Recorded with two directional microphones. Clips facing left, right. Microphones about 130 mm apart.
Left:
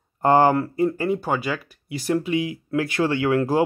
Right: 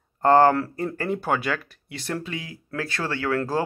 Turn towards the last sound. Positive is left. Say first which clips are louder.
# left 5 dB
turn(degrees=20)  # may be behind; listen again after turning